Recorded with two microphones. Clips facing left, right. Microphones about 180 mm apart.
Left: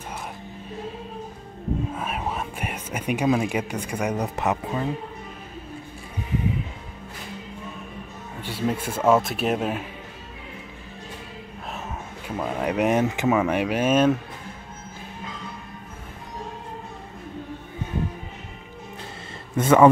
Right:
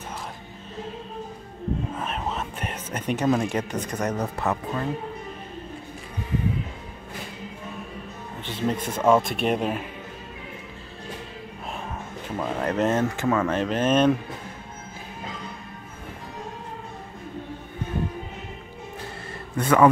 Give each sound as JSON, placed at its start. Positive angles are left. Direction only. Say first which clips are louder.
{"t": 2.0, "sound": "speech", "louder": "left 1 dB", "side_deg": 10}
{"t": 8.5, "sound": "speech", "louder": "even", "side_deg": 10}
{"t": 12.4, "sound": "speech", "louder": "left 1 dB", "side_deg": 10}
{"t": 19.5, "sound": "a man's voice", "louder": "left 3 dB", "side_deg": 25}